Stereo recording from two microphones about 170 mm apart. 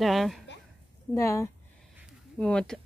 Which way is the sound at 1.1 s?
15° left (ahead or behind).